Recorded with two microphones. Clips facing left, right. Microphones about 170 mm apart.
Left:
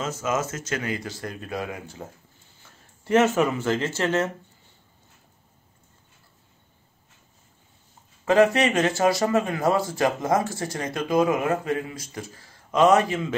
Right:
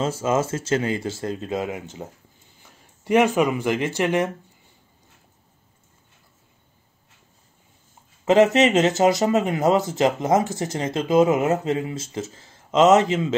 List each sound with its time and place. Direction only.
0.0 s speech: 30° right (ahead or behind)
8.3 s speech: 20° right (ahead or behind)